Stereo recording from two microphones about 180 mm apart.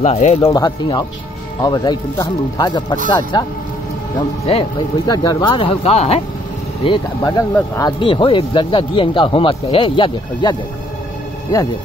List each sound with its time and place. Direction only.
0.0 s speech: 40° left (ahead or behind)
0.4 s speech: 20° left (ahead or behind)
6.8 s speech: 25° left (ahead or behind)